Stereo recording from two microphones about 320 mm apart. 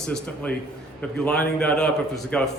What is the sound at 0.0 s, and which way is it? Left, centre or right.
A man's voice, centre.